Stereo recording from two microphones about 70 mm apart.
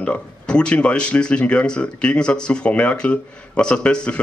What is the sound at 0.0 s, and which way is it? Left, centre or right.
Speech, centre.